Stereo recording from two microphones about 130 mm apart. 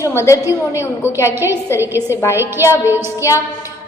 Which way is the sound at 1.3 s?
15° right (ahead or behind).